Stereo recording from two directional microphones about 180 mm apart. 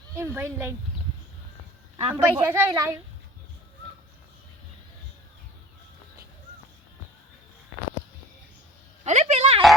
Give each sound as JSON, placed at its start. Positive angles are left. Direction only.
{"t": 0.2, "sound": "a woman's voice", "side_deg": -15}
{"t": 2.1, "sound": "a woman's voice", "side_deg": -10}
{"t": 9.0, "sound": "a woman's voice", "side_deg": -40}